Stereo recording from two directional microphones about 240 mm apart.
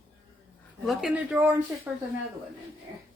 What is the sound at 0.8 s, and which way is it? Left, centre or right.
Speech, centre.